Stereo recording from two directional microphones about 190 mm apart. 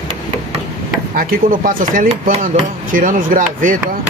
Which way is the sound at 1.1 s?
50° right (ahead or behind).